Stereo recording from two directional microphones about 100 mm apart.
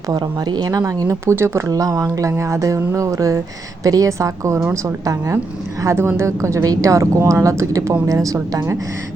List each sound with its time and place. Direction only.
0.1 s speech: 40° right (ahead or behind)